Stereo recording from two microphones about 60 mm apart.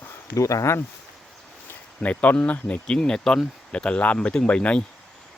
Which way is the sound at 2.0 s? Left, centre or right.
Left.